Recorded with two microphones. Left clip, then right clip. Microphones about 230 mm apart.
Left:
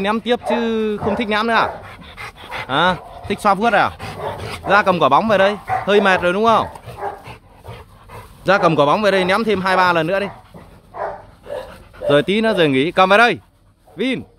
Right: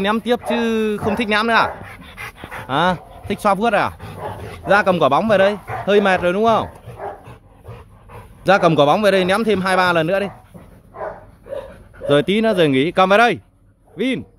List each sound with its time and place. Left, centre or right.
0.0 s speech: centre
4.0 s dog: left
4.6 s speech: centre
8.5 s speech: centre
12.1 s speech: centre